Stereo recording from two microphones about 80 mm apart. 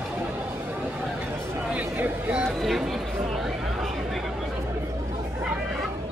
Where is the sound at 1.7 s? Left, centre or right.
Right.